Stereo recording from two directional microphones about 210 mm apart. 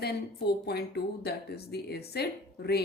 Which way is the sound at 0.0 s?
50° left (ahead or behind).